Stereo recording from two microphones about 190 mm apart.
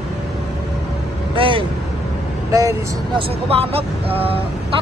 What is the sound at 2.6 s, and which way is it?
Speech, 15° right (ahead or behind).